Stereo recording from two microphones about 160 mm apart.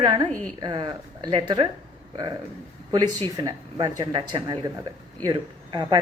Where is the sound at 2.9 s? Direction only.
25° right (ahead or behind).